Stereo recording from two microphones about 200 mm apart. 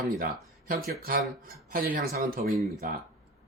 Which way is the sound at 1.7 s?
45° right (ahead or behind).